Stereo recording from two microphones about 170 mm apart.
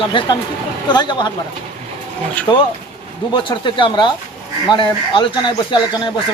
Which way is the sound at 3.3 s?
25° left (ahead or behind).